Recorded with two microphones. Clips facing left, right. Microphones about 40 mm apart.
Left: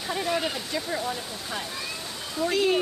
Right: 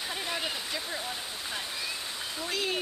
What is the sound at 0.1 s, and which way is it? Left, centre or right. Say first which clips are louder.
Waterfall: left 9 dB; centre.